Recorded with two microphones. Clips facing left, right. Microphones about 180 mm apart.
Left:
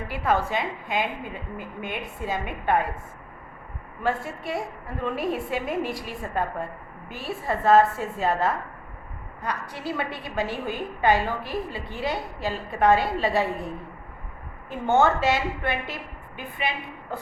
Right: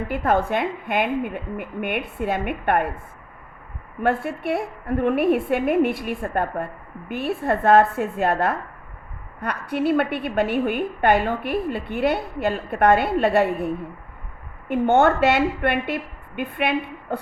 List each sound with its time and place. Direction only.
0.1 s a woman's voice: 55° right (ahead or behind)
4.0 s a woman's voice: 60° right (ahead or behind)
14.7 s a woman's voice: 60° right (ahead or behind)